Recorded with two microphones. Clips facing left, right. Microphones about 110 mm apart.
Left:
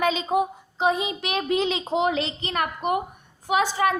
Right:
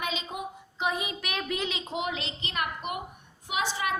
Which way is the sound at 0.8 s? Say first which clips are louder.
Left 7 dB; 25° left (ahead or behind).